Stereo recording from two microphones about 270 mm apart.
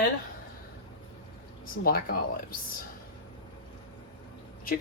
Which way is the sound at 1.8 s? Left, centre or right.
Left.